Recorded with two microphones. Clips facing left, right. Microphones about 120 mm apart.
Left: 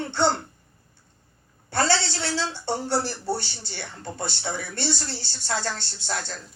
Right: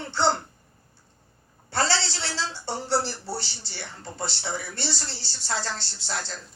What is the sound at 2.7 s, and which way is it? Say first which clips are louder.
Speech: even; 50° left (ahead or behind).